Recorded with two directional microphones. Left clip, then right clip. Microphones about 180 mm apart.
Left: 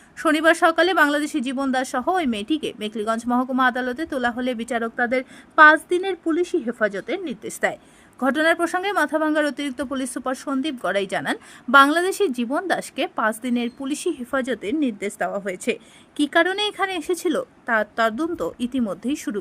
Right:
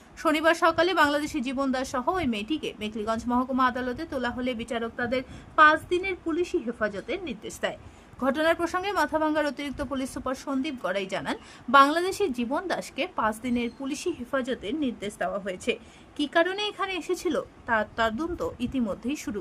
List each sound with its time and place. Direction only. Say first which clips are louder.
0.2 s speech: left 5 dB; 25° left (ahead or behind)